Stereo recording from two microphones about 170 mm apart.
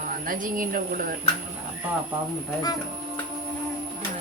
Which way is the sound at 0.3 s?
55° right (ahead or behind).